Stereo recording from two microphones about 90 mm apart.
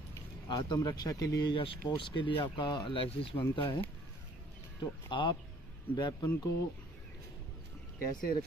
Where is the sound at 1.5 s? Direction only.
75° left (ahead or behind).